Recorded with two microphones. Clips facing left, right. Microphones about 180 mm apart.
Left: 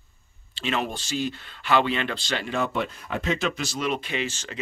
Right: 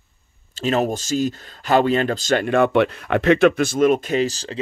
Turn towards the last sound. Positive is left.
turn(degrees=-35)  # may be behind; listen again after turning